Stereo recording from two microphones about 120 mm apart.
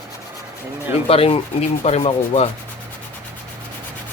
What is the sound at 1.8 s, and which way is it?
Rub, 60° left (ahead or behind).